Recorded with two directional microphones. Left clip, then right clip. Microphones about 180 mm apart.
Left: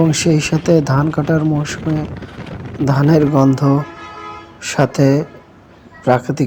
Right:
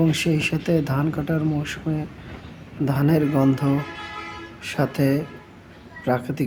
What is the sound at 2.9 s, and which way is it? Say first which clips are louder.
Speech: left 8 dB; 20° left (ahead or behind).